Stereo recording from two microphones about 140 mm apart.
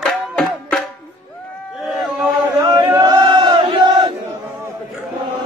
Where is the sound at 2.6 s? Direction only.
30° right (ahead or behind).